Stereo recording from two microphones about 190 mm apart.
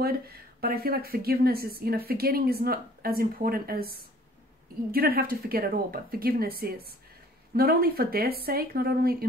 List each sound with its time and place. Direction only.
0.0 s speech: 55° right (ahead or behind)
4.9 s speech: 50° right (ahead or behind)